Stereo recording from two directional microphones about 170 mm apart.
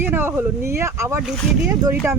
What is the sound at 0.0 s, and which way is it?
Speech, 10° right (ahead or behind).